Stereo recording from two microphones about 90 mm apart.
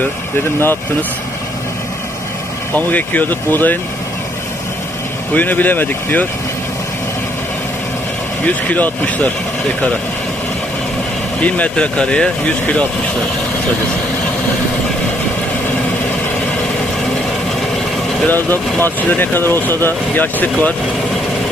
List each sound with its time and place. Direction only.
2.7 s speech: 15° left (ahead or behind)
5.3 s speech: 20° left (ahead or behind)
8.4 s speech: 20° left (ahead or behind)
11.3 s speech: 15° left (ahead or behind)
18.3 s speech: 20° left (ahead or behind)